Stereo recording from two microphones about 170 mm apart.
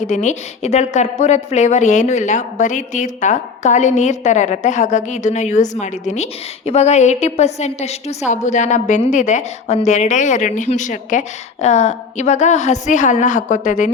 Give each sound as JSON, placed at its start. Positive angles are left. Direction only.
{"t": 0.0, "sound": "a woman's voice", "side_deg": 45}